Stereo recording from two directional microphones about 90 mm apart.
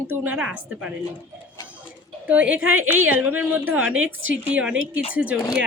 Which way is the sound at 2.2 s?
15° right (ahead or behind).